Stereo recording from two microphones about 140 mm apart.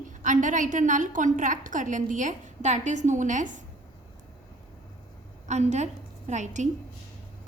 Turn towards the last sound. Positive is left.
turn(degrees=-60)  # may be behind; listen again after turning